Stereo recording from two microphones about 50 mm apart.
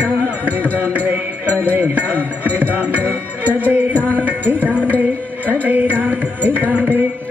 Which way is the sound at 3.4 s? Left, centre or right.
Right.